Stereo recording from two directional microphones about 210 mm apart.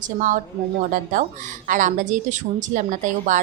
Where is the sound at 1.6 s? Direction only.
35° right (ahead or behind).